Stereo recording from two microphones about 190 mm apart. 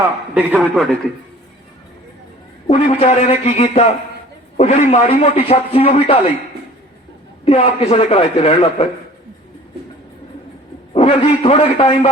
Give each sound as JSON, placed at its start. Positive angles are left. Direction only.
{"t": 0.0, "sound": "a man's voice", "side_deg": -10}
{"t": 2.6, "sound": "a man's voice", "side_deg": 30}
{"t": 7.4, "sound": "a man's voice", "side_deg": 30}
{"t": 10.9, "sound": "a man's voice", "side_deg": 30}